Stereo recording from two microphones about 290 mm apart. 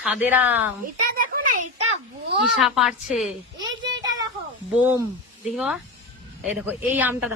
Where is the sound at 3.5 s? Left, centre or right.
Centre.